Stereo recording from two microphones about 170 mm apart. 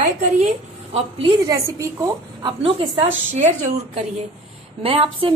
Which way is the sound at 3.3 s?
45° right (ahead or behind).